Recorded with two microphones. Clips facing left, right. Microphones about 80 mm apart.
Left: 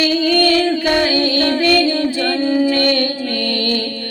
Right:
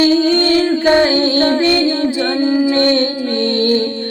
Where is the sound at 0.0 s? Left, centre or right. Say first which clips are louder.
Right 3 dB; right.